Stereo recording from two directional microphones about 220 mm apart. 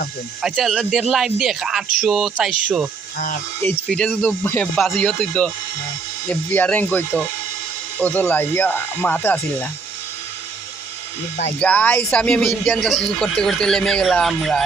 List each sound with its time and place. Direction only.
0.4 s speech: centre (ahead or behind)
3.9 s speech: 5° left (ahead or behind)
11.6 s speech: 5° left (ahead or behind)